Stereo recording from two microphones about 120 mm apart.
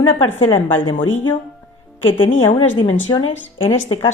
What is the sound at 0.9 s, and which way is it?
A woman's voice, 45° left (ahead or behind).